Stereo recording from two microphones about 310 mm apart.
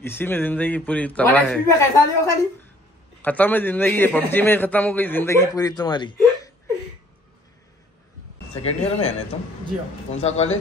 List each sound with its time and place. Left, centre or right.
0.0 s a man's voice: centre
8.6 s speech: centre
10.2 s speech: left